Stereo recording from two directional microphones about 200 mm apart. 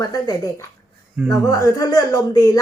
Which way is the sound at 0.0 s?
15° left (ahead or behind).